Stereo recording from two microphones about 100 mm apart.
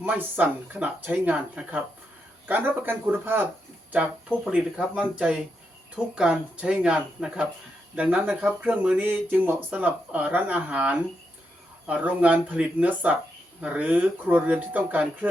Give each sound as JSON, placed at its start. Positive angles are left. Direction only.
{"t": 0.0, "sound": "speech", "side_deg": -15}
{"t": 4.4, "sound": "speech", "side_deg": -10}